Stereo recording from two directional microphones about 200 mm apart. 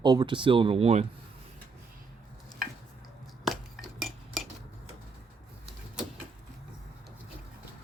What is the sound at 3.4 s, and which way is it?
Cutlery, centre (ahead or behind).